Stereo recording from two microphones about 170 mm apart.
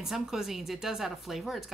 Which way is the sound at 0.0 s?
Centre (ahead or behind).